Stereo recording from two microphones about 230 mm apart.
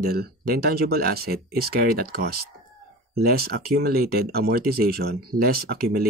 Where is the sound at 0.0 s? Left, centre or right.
Right.